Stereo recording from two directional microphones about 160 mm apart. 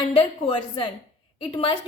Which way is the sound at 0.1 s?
35° left (ahead or behind).